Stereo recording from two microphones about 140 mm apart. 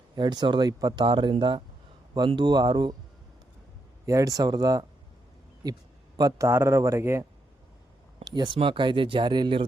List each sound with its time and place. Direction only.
0.2 s speech: 30° right (ahead or behind)
4.0 s speech: 25° right (ahead or behind)
6.1 s speech: 30° right (ahead or behind)
6.5 s speech: 20° right (ahead or behind)
8.2 s speech: 30° right (ahead or behind)